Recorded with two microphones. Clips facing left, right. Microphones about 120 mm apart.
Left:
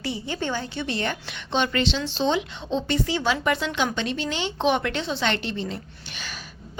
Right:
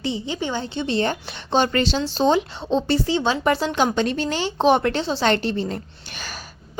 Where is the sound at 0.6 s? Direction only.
25° right (ahead or behind).